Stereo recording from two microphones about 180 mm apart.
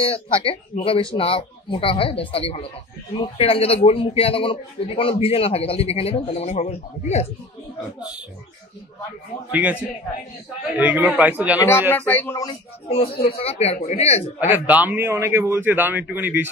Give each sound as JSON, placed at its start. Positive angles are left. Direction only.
{"t": 0.0, "sound": "a man's voice", "side_deg": 30}
{"t": 9.5, "sound": "a man's voice", "side_deg": -10}
{"t": 10.8, "sound": "a man's voice", "side_deg": -10}
{"t": 11.9, "sound": "speech", "side_deg": 10}
{"t": 12.4, "sound": "a man's voice", "side_deg": 35}
{"t": 14.4, "sound": "a man's voice", "side_deg": -10}